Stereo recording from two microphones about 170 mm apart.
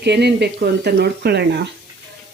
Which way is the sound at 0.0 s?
80° right.